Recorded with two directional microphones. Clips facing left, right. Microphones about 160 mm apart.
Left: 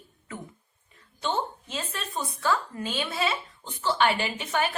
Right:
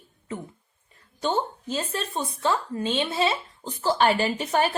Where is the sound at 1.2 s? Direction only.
35° right (ahead or behind).